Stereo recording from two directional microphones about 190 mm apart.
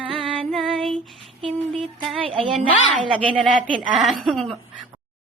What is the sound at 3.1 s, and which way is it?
Speech, 25° right (ahead or behind).